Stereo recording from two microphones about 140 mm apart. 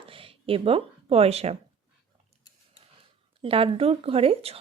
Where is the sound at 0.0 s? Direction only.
40° right (ahead or behind).